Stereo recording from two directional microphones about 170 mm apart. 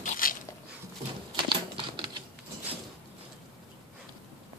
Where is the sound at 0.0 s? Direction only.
50° left (ahead or behind).